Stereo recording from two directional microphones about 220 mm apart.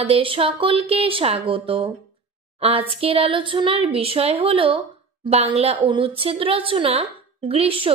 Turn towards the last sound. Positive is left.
turn(degrees=-25)  # may be behind; listen again after turning